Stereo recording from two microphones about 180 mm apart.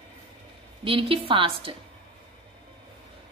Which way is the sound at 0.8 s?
30° right (ahead or behind).